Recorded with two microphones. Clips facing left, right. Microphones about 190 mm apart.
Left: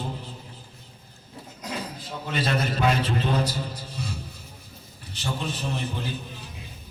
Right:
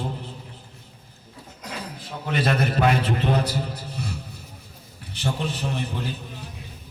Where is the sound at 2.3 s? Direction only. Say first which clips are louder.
Right 3 dB; 55° right (ahead or behind).